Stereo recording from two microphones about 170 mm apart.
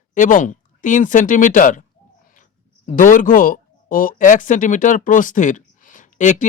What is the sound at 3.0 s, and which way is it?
Speech, 50° left (ahead or behind).